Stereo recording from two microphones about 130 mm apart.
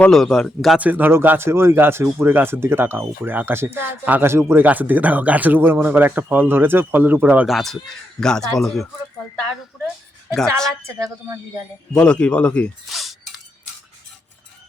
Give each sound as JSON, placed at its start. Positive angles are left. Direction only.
{"t": 0.0, "sound": "speech", "side_deg": 5}
{"t": 0.8, "sound": "speech", "side_deg": -15}
{"t": 7.4, "sound": "speech", "side_deg": 0}
{"t": 10.8, "sound": "a woman's voice", "side_deg": -20}
{"t": 11.9, "sound": "speech", "side_deg": 5}